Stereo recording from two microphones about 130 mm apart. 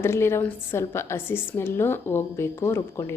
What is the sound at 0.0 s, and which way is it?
A woman's voice, 20° left (ahead or behind).